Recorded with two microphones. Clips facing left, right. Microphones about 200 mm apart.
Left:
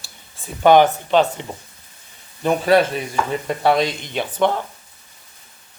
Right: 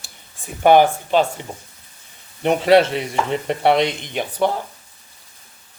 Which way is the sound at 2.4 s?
25° right (ahead or behind).